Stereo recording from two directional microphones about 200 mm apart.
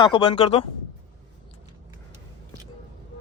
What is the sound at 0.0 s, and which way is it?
Speech, 25° left (ahead or behind).